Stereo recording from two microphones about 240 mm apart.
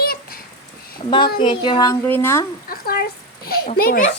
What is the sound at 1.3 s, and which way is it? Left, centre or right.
A woman's voice, centre.